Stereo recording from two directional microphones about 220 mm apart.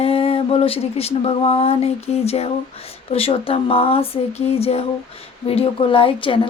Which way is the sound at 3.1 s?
25° left (ahead or behind).